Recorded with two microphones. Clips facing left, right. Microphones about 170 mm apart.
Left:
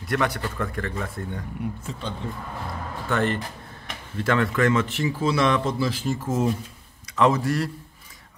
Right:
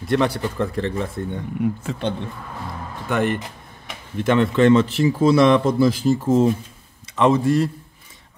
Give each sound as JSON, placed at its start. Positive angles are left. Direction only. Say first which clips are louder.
{"t": 0.0, "sound": "speech", "louder": "right 5 dB", "side_deg": -30}
{"t": 1.8, "sound": "speech", "louder": "right 8 dB", "side_deg": -70}
{"t": 3.1, "sound": "speech", "louder": "right 3 dB", "side_deg": -15}